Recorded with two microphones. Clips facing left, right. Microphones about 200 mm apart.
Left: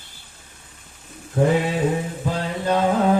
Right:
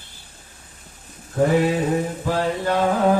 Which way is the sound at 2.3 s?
20° left (ahead or behind).